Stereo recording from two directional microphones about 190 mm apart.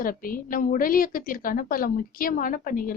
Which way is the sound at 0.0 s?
50° left (ahead or behind).